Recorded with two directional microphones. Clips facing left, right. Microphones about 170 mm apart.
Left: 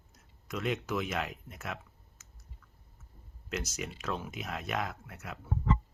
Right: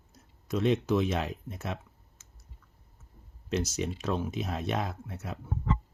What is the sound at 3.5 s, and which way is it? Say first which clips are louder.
Speech: right 7 dB; 30° right (ahead or behind).